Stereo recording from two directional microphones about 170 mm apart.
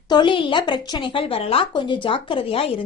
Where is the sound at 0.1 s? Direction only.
30° left (ahead or behind).